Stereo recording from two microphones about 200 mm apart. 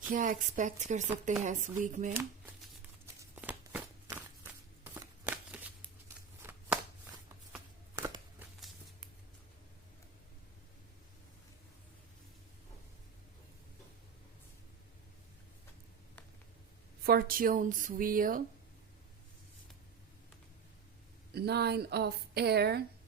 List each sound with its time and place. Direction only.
0.1 s speech: 40° right (ahead or behind)
3.3 s a sound: 10° right (ahead or behind)
4.9 s shuffling cards: 10° right (ahead or behind)
7.9 s a sound: 15° right (ahead or behind)
17.0 s a woman's voice: 50° right (ahead or behind)
21.3 s a woman's voice: 55° right (ahead or behind)